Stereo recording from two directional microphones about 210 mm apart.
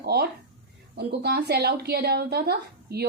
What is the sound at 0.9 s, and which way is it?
A woman's voice, 50° right (ahead or behind).